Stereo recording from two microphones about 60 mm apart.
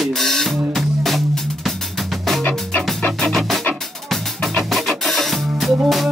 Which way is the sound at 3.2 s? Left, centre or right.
Centre.